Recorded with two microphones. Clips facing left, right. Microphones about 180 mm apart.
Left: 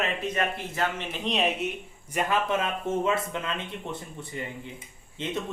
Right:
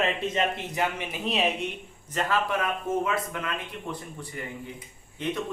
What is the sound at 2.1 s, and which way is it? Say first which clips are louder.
Speech: left 1 dB; 15° left (ahead or behind).